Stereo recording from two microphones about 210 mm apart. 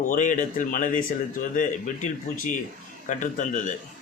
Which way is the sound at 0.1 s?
40° left (ahead or behind).